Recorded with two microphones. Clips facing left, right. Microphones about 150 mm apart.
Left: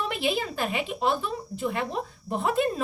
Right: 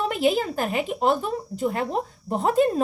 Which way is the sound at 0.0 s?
45° right (ahead or behind).